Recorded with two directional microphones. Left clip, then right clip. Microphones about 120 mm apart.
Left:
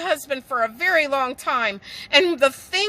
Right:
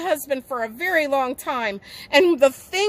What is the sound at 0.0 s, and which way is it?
A woman's voice, 20° right (ahead or behind).